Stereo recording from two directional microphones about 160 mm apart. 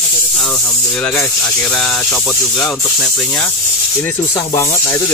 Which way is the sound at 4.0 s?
15° left (ahead or behind).